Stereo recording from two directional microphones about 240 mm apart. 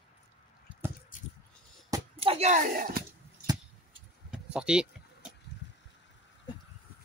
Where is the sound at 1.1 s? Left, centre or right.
Left.